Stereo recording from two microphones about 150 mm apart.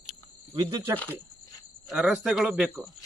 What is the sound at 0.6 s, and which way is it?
Speech, 25° right (ahead or behind).